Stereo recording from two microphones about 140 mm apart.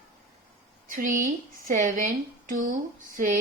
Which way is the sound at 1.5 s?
70° right (ahead or behind).